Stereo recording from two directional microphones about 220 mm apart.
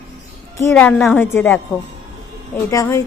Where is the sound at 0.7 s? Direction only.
5° left (ahead or behind).